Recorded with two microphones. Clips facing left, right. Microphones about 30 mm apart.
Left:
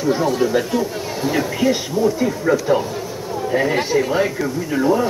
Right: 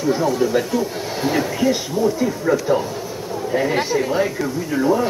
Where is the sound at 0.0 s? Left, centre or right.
Centre.